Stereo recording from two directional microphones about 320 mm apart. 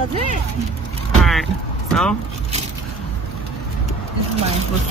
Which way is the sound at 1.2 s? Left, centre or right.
Centre.